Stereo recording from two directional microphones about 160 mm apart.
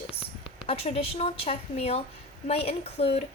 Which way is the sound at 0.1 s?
35° left (ahead or behind).